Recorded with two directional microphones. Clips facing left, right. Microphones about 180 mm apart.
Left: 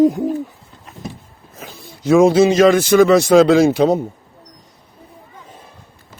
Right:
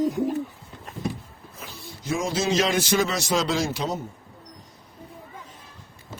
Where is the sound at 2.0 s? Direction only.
70° left (ahead or behind).